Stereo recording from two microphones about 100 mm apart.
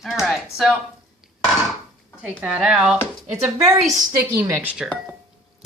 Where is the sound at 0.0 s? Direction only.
5° right (ahead or behind).